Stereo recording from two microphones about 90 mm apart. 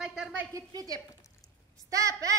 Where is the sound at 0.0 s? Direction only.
Centre (ahead or behind).